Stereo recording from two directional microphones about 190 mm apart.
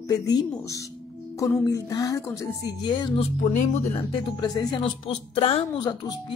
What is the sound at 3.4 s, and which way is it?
Speech, 35° left (ahead or behind).